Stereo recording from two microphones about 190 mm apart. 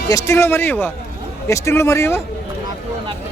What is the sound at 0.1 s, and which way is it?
Speech, 15° left (ahead or behind).